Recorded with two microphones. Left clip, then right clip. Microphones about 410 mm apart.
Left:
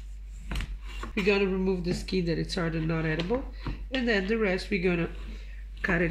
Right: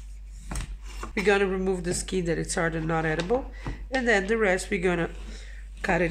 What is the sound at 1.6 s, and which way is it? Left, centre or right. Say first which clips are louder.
Speech: right 2 dB; centre.